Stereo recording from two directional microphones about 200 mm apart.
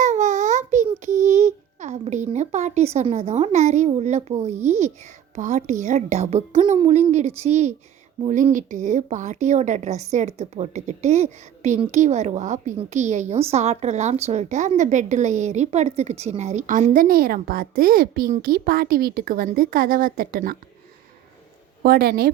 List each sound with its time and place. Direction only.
0.0 s baby cry: 35° right (ahead or behind)
0.9 s a child's voice: 35° right (ahead or behind)
21.8 s a woman's voice: 50° right (ahead or behind)